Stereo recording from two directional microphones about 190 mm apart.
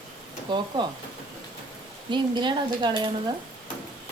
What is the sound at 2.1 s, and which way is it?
Speech, 25° right (ahead or behind).